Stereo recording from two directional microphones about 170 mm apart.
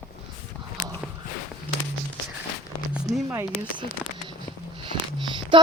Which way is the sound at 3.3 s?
20° right (ahead or behind).